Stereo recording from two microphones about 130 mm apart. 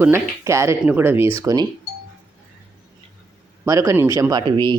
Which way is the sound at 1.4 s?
25° right (ahead or behind).